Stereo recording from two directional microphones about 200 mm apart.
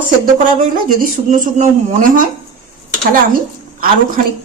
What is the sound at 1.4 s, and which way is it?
Speech, 40° right (ahead or behind).